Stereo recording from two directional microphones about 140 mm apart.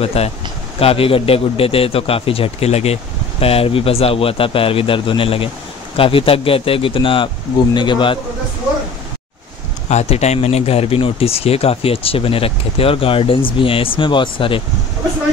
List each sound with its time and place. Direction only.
0.0 s a man's voice: 45° left (ahead or behind)
9.8 s a man's voice: 50° left (ahead or behind)